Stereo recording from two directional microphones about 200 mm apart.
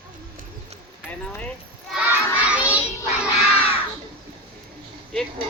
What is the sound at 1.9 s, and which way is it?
Crowd, 5° right (ahead or behind).